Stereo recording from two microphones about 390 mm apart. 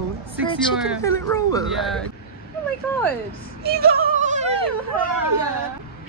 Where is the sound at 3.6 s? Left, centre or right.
Right.